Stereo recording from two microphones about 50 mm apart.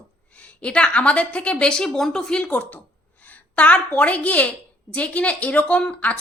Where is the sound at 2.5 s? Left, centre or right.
Left.